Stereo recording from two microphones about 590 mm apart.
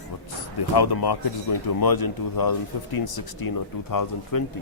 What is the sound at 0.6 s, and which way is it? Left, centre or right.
A man's voice, left.